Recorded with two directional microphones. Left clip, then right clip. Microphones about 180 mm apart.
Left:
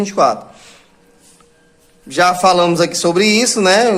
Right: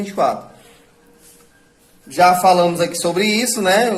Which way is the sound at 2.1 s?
40° left (ahead or behind).